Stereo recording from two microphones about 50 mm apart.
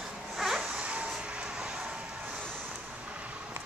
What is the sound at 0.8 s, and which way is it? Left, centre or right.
Vehicle, right.